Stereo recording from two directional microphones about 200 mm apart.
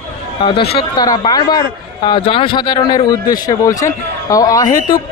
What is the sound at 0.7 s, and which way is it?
A man's voice, 20° left (ahead or behind).